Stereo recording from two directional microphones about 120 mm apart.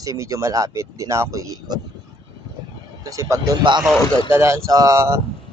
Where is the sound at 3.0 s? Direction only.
25° right (ahead or behind).